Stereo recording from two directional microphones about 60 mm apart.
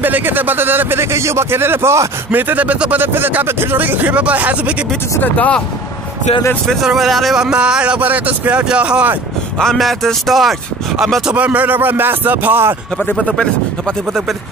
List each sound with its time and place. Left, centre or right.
0.0 s speech: right
2.3 s speech: right
3.0 s speech: right
6.8 s speech: centre
7.3 s speech: centre
8.0 s speech: right
9.6 s speech: centre
11.3 s speech: right